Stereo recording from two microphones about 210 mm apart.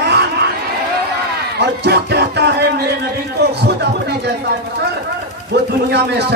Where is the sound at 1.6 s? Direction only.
50° right (ahead or behind).